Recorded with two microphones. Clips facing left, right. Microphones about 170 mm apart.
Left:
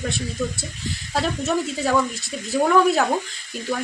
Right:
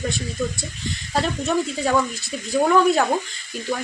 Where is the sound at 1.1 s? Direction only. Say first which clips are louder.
Right 1 dB; centre (ahead or behind).